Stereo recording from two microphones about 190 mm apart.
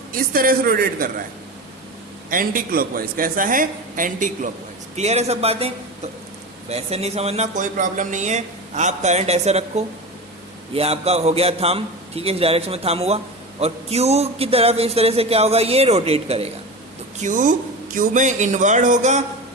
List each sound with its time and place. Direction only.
0.1 s a man's voice: 50° right (ahead or behind)
2.3 s a man's voice: 50° right (ahead or behind)